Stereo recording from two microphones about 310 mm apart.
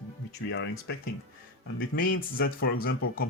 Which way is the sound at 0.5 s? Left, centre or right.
Left.